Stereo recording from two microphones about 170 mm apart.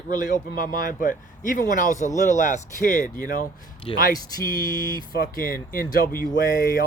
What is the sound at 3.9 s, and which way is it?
Speech, 30° left (ahead or behind).